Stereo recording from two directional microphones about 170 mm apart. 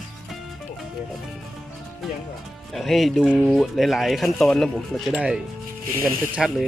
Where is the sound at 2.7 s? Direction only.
Centre (ahead or behind).